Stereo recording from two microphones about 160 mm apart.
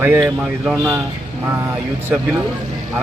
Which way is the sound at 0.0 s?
10° right (ahead or behind).